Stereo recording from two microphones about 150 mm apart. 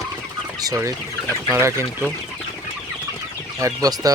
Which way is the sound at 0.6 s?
25° right (ahead or behind).